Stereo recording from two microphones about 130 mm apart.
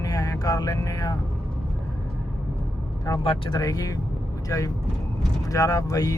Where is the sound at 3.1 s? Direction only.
35° left (ahead or behind).